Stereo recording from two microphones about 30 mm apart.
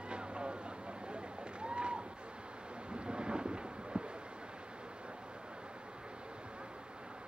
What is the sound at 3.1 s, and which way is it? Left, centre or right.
Thunder, right.